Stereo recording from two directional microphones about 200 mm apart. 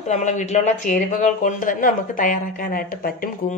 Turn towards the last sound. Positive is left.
turn(degrees=45)  # may be behind; listen again after turning